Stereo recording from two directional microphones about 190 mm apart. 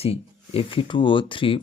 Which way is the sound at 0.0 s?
30° left (ahead or behind).